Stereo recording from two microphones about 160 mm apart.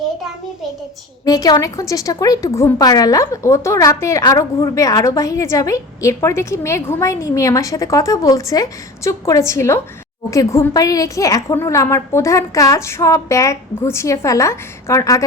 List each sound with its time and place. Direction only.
1.2 s a woman's voice: 25° left (ahead or behind)